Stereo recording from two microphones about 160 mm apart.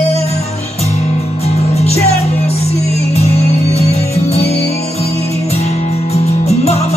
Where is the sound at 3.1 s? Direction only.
40° left (ahead or behind).